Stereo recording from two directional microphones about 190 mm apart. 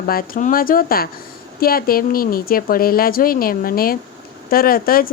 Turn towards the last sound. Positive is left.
turn(degrees=50)  # may be behind; listen again after turning